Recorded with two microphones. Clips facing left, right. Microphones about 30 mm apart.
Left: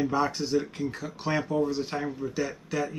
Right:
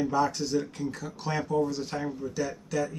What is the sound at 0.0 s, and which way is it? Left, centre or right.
Speech, left.